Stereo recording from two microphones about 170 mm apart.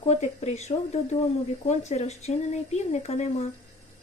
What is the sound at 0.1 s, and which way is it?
Speech, 40° left (ahead or behind).